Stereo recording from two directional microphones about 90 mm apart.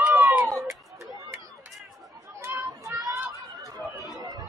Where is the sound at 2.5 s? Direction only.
40° right (ahead or behind).